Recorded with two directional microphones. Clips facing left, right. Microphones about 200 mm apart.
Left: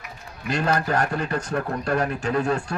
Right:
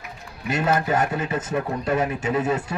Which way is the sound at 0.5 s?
5° right (ahead or behind).